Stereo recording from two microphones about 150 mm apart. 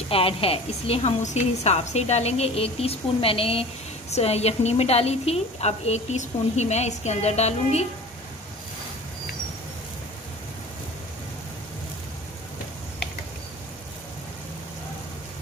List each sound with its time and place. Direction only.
0.1 s a woman's voice: 40° left (ahead or behind)